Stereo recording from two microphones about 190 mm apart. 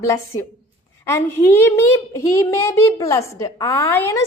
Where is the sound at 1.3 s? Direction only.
15° left (ahead or behind).